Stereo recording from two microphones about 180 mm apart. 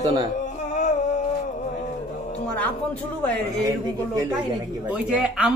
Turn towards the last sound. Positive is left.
turn(degrees=-5)  # may be behind; listen again after turning